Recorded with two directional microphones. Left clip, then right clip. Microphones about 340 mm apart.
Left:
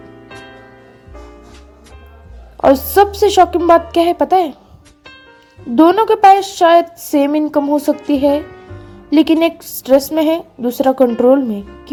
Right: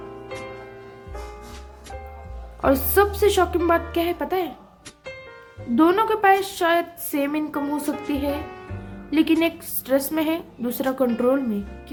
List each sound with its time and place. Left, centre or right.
2.6 s speech: centre
5.7 s speech: centre